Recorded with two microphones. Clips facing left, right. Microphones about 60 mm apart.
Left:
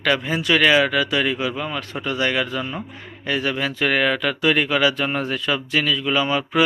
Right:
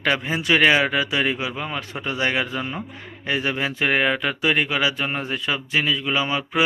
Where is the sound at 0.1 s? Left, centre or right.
Right.